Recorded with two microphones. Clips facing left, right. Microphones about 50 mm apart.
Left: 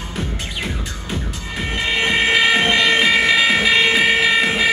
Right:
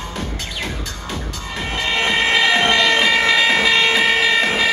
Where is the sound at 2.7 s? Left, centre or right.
Centre.